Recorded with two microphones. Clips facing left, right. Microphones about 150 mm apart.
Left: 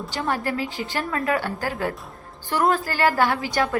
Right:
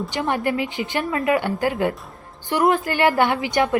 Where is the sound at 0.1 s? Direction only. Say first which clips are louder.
Right 1 dB; 20° right (ahead or behind).